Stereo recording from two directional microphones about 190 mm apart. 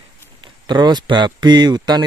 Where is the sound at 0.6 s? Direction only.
25° right (ahead or behind).